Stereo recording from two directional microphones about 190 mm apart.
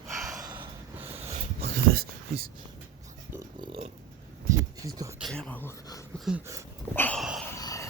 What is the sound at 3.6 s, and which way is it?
Speech, 25° right (ahead or behind).